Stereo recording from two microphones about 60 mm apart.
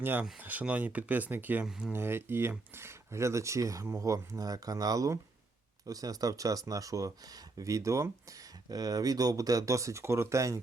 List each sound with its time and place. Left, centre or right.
0.0 s speech: right
5.8 s speech: right
7.6 s speech: right
8.7 s speech: right